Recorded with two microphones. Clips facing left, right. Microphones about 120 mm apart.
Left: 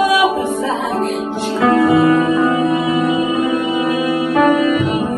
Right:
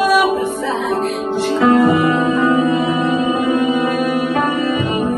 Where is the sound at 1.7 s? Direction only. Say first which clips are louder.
Left 2 dB; 15° right (ahead or behind).